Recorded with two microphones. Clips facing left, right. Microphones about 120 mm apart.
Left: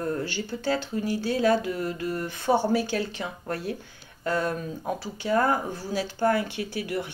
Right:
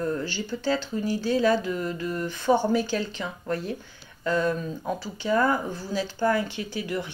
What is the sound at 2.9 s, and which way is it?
Speech, 55° left (ahead or behind).